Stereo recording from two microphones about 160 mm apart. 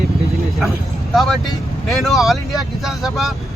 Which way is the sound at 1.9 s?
Centre (ahead or behind).